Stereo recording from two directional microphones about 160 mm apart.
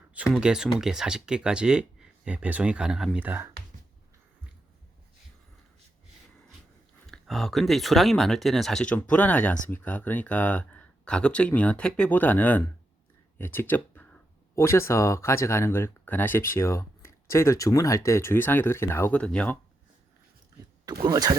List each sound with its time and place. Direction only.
0.3 s speech: 5° right (ahead or behind)
7.1 s speech: centre (ahead or behind)
20.8 s speech: 25° right (ahead or behind)